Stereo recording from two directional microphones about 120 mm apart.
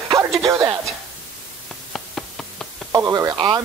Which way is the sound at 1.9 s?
Centre (ahead or behind).